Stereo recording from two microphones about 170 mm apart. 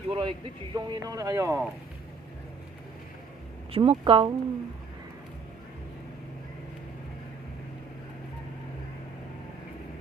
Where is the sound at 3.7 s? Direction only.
35° right (ahead or behind).